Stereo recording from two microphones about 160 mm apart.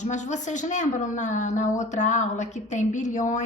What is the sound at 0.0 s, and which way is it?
A woman's voice, 50° left (ahead or behind).